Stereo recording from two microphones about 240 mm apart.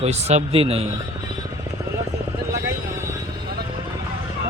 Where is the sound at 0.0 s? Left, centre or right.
Right.